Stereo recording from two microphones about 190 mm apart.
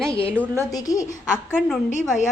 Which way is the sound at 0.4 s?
10° right (ahead or behind).